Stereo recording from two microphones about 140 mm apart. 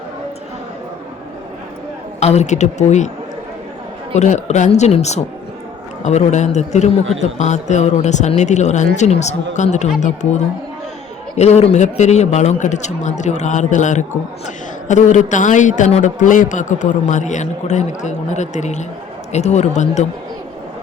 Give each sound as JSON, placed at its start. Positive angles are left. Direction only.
{"t": 2.2, "sound": "a man's voice", "side_deg": 55}
{"t": 4.1, "sound": "a man's voice", "side_deg": 55}